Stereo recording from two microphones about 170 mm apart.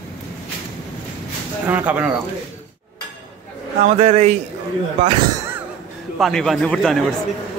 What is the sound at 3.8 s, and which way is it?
Speech, 40° right (ahead or behind).